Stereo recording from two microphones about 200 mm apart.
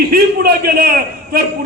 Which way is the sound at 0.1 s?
45° right (ahead or behind).